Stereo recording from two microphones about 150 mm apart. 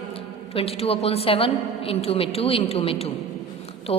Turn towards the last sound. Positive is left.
turn(degrees=40)  # may be behind; listen again after turning